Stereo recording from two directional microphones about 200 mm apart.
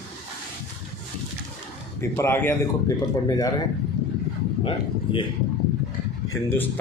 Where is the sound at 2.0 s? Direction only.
10° left (ahead or behind).